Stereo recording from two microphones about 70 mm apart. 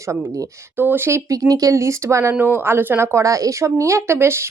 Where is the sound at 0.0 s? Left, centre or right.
Right.